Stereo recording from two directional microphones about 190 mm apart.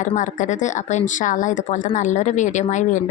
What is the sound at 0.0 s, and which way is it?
A woman's voice, 40° left (ahead or behind).